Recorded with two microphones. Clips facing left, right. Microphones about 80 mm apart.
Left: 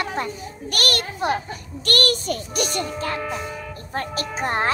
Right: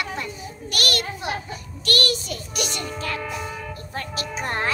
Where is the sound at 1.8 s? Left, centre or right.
Left.